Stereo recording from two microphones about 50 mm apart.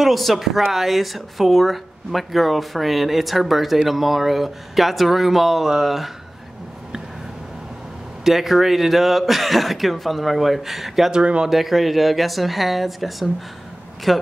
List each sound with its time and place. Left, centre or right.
0.0 s speech: centre
8.2 s speech: centre
11.1 s speech: centre
11.5 s speech: centre